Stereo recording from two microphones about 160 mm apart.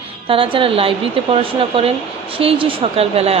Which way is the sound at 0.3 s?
35° right (ahead or behind).